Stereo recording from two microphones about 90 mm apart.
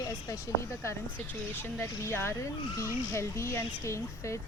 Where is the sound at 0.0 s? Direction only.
40° left (ahead or behind).